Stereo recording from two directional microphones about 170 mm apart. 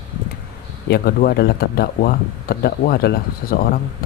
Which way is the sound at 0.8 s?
70° left (ahead or behind).